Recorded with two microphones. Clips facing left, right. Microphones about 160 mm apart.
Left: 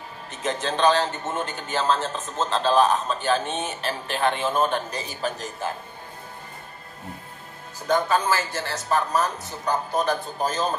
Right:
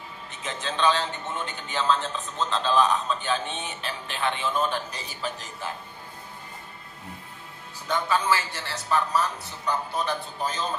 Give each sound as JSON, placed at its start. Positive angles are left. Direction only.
{"t": 0.4, "sound": "a man's voice", "side_deg": 45}
{"t": 7.8, "sound": "a man's voice", "side_deg": 45}